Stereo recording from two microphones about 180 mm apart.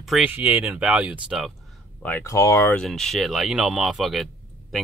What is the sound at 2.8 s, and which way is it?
Speech, centre (ahead or behind).